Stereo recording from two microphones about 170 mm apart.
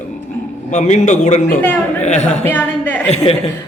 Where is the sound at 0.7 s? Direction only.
45° left (ahead or behind).